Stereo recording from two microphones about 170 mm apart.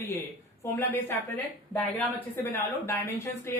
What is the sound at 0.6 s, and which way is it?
Speech, 15° left (ahead or behind).